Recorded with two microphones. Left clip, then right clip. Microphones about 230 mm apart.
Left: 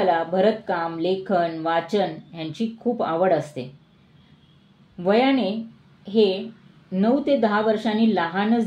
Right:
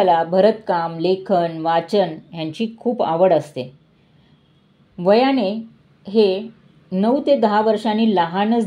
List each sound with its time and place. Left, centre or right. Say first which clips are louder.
0.0 s speech: right 5 dB; right
4.9 s a woman's voice: right 4 dB; right